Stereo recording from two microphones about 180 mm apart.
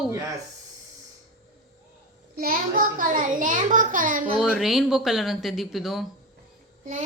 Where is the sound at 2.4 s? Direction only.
50° right (ahead or behind).